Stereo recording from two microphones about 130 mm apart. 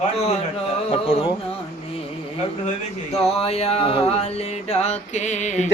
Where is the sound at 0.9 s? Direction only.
55° left (ahead or behind).